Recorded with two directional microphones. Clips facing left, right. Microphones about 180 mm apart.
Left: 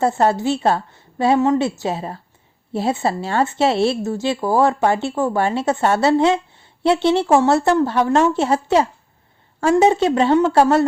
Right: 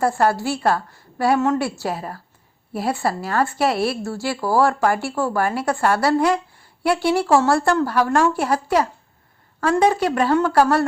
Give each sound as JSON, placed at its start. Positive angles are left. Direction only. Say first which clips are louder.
{"t": 0.0, "sound": "speech", "louder": "left 2 dB", "side_deg": 20}